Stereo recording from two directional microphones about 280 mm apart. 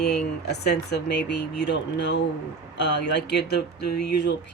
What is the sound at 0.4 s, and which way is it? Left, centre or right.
Speech, left.